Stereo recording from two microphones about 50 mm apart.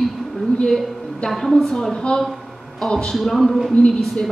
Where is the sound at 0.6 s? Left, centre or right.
Centre.